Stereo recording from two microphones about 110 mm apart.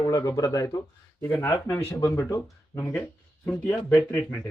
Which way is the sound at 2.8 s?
10° left (ahead or behind).